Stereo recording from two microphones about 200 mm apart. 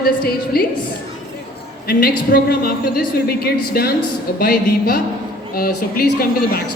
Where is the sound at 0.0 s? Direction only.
50° left (ahead or behind).